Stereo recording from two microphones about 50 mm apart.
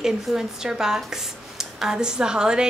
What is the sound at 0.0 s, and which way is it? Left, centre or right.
A woman's voice, centre.